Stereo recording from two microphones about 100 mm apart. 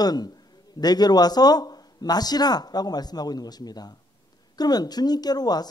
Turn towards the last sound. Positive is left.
turn(degrees=40)  # may be behind; listen again after turning